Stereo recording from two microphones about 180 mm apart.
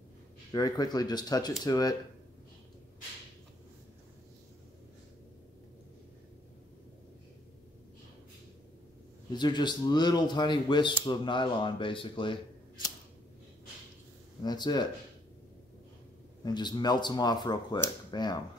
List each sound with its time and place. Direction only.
0.5 s speech: 20° left (ahead or behind)
9.3 s speech: 25° left (ahead or behind)
14.4 s speech: 25° left (ahead or behind)
16.4 s speech: 25° left (ahead or behind)